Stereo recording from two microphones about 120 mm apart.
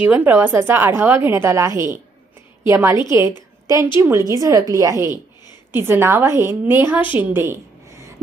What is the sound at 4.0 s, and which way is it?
A woman's voice, 25° right (ahead or behind).